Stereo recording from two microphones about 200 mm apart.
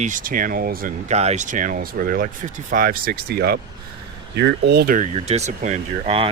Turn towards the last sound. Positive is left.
turn(degrees=-30)  # may be behind; listen again after turning